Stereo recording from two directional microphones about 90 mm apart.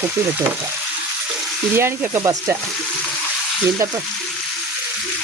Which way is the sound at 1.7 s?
30° right (ahead or behind).